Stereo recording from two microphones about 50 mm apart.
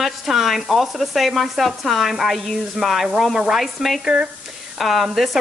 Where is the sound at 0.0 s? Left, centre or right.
Centre.